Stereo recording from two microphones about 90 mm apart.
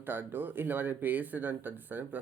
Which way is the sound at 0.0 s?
20° right (ahead or behind).